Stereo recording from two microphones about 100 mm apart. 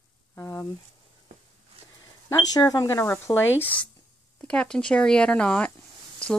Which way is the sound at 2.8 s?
25° left (ahead or behind).